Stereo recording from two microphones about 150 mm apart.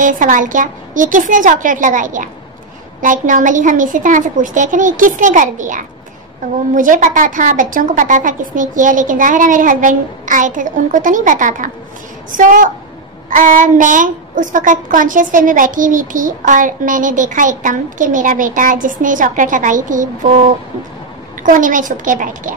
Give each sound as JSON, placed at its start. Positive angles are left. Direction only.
{"t": 0.0, "sound": "a woman's voice", "side_deg": -60}
{"t": 21.4, "sound": "a woman's voice", "side_deg": -60}